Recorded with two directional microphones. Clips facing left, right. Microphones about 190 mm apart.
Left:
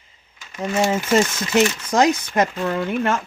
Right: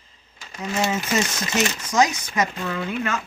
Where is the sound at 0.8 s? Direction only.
50° left (ahead or behind).